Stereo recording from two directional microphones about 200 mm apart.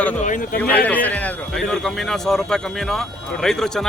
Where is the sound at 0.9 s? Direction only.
5° left (ahead or behind).